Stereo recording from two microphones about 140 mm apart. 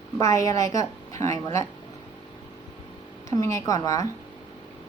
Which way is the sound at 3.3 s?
20° left (ahead or behind).